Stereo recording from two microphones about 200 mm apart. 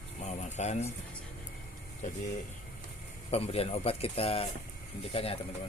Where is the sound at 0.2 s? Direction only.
35° left (ahead or behind).